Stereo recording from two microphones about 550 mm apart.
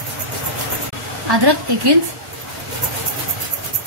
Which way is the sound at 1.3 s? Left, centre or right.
Right.